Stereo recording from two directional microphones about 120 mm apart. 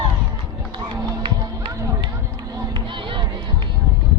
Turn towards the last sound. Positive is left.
turn(degrees=-40)  # may be behind; listen again after turning